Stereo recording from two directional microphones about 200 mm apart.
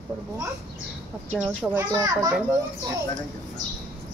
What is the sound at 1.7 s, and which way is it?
Speech, 20° right (ahead or behind).